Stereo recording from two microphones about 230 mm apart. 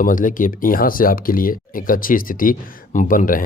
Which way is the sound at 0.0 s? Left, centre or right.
Left.